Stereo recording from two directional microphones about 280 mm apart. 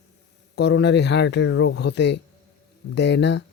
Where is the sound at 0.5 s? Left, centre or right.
Left.